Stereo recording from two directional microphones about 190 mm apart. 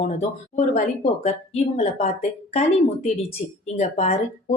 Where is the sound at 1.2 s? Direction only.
35° left (ahead or behind).